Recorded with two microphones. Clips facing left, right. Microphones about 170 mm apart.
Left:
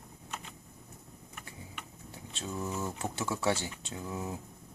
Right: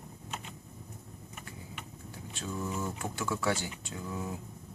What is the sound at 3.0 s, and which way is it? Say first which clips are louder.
Speech: even; 25° left (ahead or behind).